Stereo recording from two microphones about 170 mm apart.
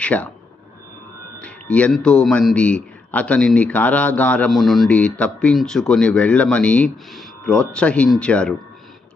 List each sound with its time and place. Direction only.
0.0 s speech: 10° left (ahead or behind)
1.4 s a man's voice: 5° left (ahead or behind)